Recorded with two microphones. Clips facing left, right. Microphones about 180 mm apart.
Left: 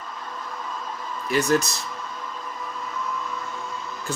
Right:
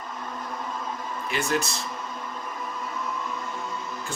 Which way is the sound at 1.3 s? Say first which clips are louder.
Left 6 dB; 40° left (ahead or behind).